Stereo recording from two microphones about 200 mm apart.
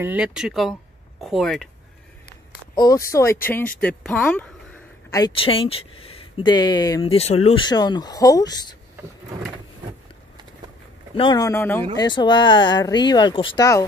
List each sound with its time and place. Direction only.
0.0 s speech: 5° right (ahead or behind)
2.7 s speech: 20° left (ahead or behind)
5.1 s speech: 25° left (ahead or behind)
11.1 s speech: 20° left (ahead or behind)
12.1 s speech: 20° left (ahead or behind)